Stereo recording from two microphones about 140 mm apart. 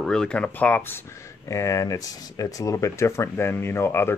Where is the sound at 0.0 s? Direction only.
5° left (ahead or behind).